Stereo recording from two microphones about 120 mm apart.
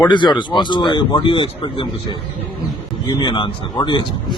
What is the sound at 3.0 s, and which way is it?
A man's voice, 35° left (ahead or behind).